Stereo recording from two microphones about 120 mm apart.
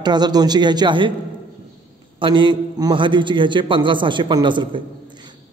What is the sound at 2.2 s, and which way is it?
Speech, 40° right (ahead or behind).